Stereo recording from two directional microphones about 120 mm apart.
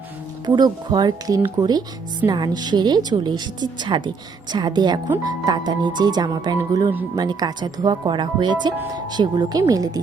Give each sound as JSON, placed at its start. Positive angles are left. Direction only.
{"t": 0.4, "sound": "speech", "side_deg": -35}